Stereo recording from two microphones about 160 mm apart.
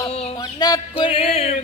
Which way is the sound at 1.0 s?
35° left (ahead or behind).